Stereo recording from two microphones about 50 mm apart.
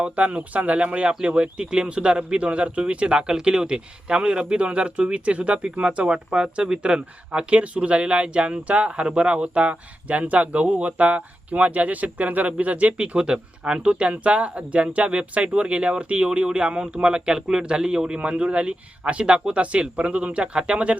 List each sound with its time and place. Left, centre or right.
0.0 s speech: right